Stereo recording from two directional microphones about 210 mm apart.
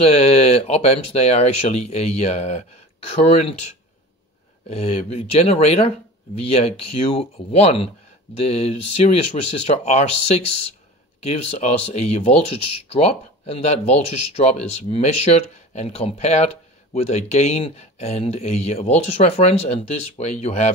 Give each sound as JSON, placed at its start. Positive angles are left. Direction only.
{"t": 0.0, "sound": "speech", "side_deg": 30}
{"t": 4.6, "sound": "speech", "side_deg": 30}